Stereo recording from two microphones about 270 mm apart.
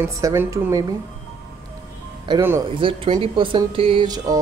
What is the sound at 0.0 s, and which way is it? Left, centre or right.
Speech, centre.